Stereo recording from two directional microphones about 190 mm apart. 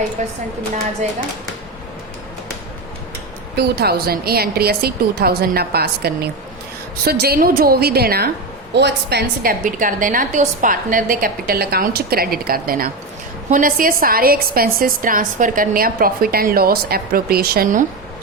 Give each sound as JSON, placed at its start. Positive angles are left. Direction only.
{"t": 0.2, "sound": "a woman's voice", "side_deg": -40}
{"t": 3.5, "sound": "a woman's voice", "side_deg": -55}